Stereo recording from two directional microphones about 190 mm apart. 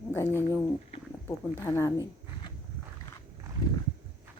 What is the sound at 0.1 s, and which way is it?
A woman's voice, 10° left (ahead or behind).